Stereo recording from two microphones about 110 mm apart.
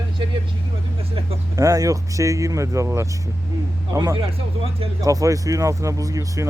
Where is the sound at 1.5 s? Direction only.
30° right (ahead or behind).